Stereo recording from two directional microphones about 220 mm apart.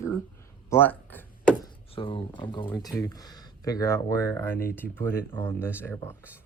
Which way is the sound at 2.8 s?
15° left (ahead or behind).